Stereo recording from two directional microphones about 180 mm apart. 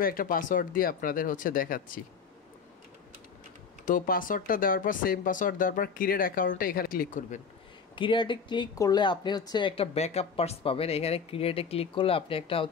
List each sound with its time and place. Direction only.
0.0 s speech: 55° left (ahead or behind)
3.8 s speech: 50° left (ahead or behind)
7.9 s speech: 25° left (ahead or behind)